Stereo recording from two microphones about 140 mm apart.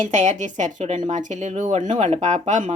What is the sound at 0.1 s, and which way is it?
Speech, 55° right (ahead or behind).